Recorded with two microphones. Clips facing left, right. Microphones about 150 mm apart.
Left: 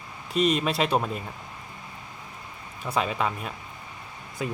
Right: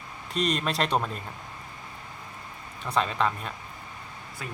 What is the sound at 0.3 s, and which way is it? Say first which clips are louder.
Speech: left 4 dB; 5° left (ahead or behind).